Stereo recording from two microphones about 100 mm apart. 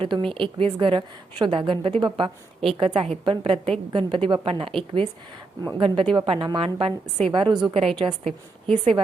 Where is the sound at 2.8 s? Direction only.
65° right (ahead or behind).